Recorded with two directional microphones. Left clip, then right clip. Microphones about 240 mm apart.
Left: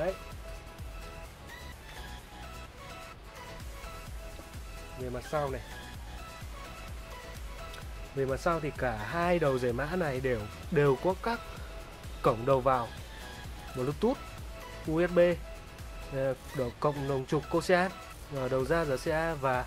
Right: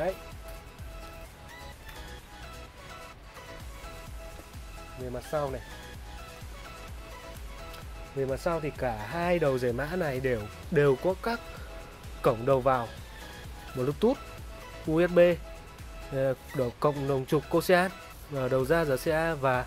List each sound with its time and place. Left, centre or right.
5.1 s speech: centre
8.2 s speech: centre
12.2 s speech: centre